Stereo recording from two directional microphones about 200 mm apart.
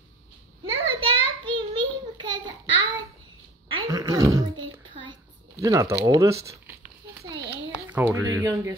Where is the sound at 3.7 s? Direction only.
20° right (ahead or behind).